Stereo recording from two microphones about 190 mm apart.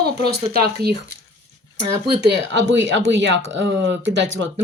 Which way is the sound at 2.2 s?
65° right (ahead or behind).